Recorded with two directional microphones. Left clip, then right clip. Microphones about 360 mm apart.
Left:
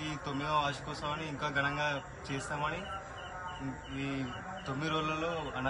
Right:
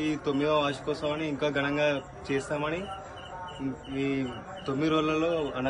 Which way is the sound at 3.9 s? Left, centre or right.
Centre.